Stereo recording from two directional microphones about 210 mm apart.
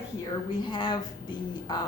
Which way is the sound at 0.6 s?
20° left (ahead or behind).